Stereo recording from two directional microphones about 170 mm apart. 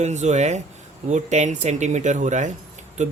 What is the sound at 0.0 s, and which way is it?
Speech, 40° right (ahead or behind).